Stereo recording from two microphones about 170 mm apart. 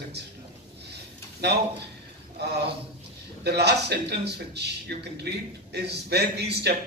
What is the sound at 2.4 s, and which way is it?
A man's voice, 75° right (ahead or behind).